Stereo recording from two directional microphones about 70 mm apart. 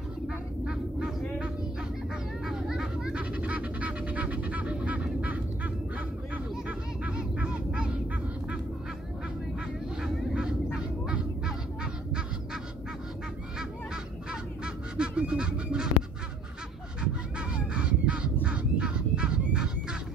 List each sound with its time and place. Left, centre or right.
0.3 s goose: centre
2.4 s duck: centre
7.1 s a sound: centre
10.0 s goose: centre
14.3 s goose: centre
17.0 s goose: centre